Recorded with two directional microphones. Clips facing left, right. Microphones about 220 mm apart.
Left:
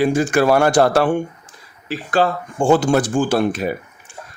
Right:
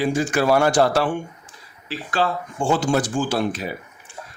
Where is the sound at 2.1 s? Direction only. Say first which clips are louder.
Left 5 dB; 45° left (ahead or behind).